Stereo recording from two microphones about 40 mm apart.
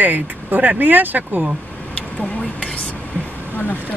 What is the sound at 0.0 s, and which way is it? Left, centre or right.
Speech, right.